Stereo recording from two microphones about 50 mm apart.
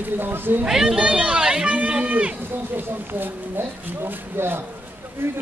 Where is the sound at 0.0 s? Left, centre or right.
Right.